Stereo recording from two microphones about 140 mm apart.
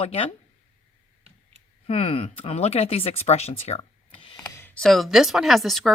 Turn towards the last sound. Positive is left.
turn(degrees=0)  # may be behind; listen again after turning